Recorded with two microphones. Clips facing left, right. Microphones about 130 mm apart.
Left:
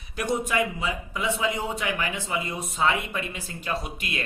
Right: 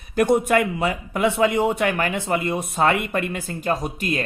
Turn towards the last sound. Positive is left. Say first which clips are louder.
# right 6 dB
turn(degrees=-40)  # may be behind; listen again after turning